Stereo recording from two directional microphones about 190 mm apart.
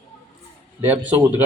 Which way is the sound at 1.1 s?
10° right (ahead or behind).